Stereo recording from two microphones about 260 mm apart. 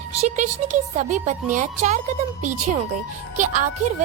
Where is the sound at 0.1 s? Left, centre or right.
Right.